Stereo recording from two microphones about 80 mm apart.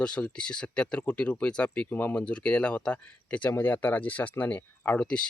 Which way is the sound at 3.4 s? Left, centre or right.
Left.